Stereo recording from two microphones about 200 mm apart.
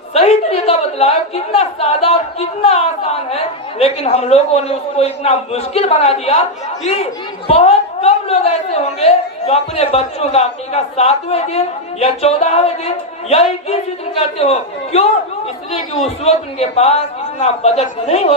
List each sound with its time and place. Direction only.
0.1 s a woman's voice: 30° left (ahead or behind)